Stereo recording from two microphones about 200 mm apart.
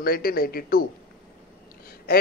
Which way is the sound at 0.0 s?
50° left (ahead or behind).